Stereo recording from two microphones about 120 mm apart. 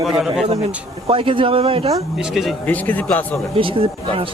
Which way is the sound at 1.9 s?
5° right (ahead or behind).